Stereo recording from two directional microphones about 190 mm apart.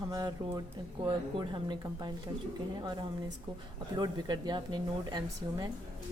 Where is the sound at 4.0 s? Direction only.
25° right (ahead or behind).